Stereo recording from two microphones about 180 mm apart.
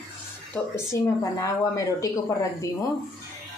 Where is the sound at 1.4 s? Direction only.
20° left (ahead or behind).